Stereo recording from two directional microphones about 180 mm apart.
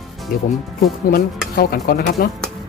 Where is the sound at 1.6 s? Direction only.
55° left (ahead or behind).